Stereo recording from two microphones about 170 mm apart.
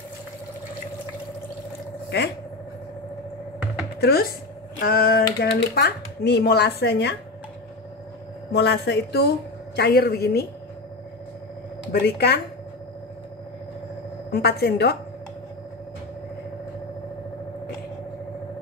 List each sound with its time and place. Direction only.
2.0 s speech: 75° left (ahead or behind)
4.0 s speech: 65° left (ahead or behind)
8.5 s a woman's voice: 80° left
9.8 s speech: 70° left (ahead or behind)
11.9 s speech: 75° left (ahead or behind)
14.3 s speech: 70° left (ahead or behind)